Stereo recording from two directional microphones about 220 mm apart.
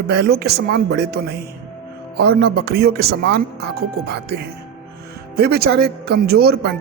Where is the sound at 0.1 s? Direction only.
50° right (ahead or behind).